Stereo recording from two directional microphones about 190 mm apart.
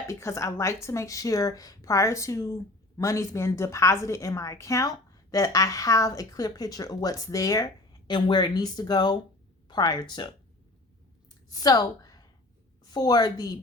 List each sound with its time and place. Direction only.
0.1 s a woman's voice: 15° left (ahead or behind)
11.4 s a woman's voice: 20° left (ahead or behind)